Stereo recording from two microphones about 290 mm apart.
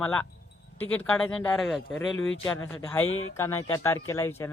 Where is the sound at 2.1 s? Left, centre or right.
Left.